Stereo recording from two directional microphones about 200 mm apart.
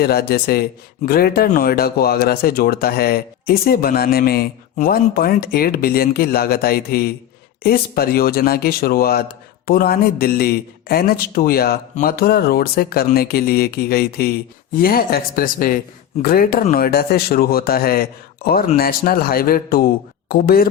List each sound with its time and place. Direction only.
0.0 s speech: 50° left (ahead or behind)